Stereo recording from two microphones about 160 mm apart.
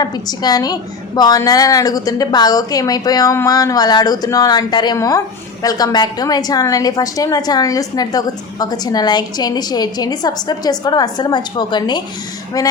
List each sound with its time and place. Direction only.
0.0 s a woman's voice: 25° left (ahead or behind)